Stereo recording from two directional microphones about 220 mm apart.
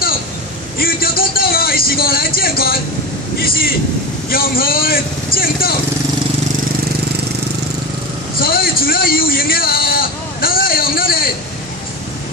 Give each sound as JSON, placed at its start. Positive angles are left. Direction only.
{"t": 0.7, "sound": "speech", "side_deg": 40}
{"t": 4.3, "sound": "a man's voice", "side_deg": 40}
{"t": 8.4, "sound": "a sound", "side_deg": 40}